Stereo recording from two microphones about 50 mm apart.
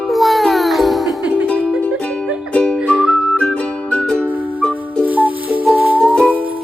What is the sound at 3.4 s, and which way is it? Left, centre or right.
Music, left.